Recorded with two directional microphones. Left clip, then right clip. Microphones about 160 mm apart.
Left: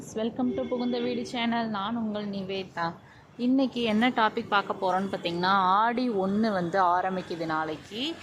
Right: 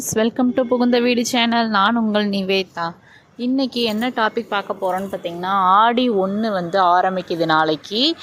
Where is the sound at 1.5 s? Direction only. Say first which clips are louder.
Right 13 dB; 35° right (ahead or behind).